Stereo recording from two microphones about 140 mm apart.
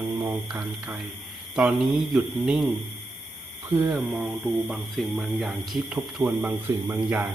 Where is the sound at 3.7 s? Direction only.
15° right (ahead or behind).